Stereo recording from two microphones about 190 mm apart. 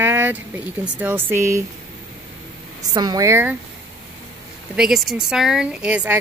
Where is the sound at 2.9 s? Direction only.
20° right (ahead or behind).